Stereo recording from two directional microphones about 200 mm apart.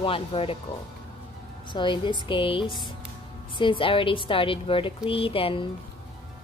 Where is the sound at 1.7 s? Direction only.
25° left (ahead or behind).